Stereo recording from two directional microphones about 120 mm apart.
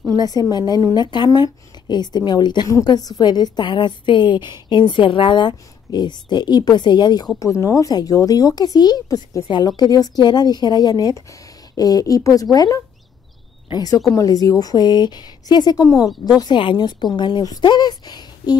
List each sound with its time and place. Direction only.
0.2 s speech: 35° left (ahead or behind)